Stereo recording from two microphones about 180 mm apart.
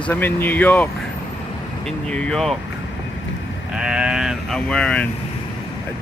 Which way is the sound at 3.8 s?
5° right (ahead or behind).